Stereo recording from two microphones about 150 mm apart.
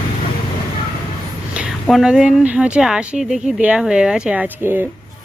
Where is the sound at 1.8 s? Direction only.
Centre (ahead or behind).